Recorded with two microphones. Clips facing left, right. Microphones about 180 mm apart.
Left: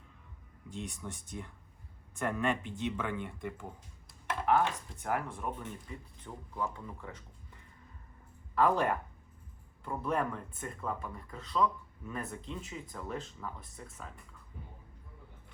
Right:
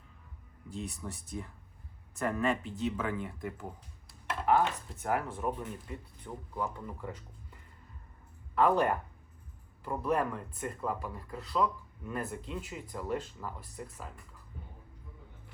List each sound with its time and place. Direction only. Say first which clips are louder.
0.8 s speech: right 1 dB; centre (ahead or behind)
6.3 s a man's voice: right 3 dB; 15° right (ahead or behind)
6.6 s speech: right 1 dB; 5° right (ahead or behind)
8.5 s speech: right 2 dB; centre (ahead or behind)